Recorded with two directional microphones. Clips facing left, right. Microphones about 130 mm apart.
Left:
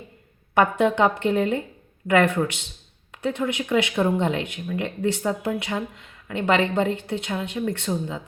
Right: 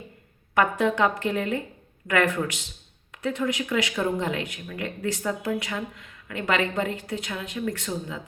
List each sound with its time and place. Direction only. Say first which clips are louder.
0.5 s speech: left 3 dB; 25° left (ahead or behind)